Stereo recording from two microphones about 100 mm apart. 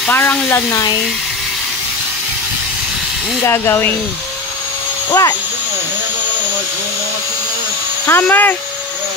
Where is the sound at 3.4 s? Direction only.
25° left (ahead or behind).